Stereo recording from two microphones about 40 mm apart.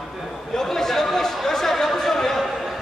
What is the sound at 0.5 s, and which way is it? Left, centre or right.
Chatter, centre.